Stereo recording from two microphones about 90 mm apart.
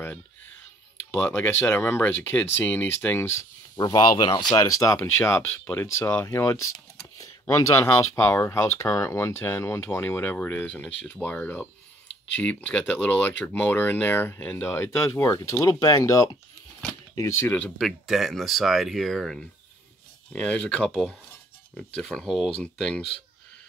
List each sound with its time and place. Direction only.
1.1 s speech: 25° left (ahead or behind)
3.7 s speech: 50° left (ahead or behind)
4.6 s speech: 40° left (ahead or behind)
5.7 s speech: 20° left (ahead or behind)
6.2 s speech: 35° left (ahead or behind)
17.5 s speech: 10° left (ahead or behind)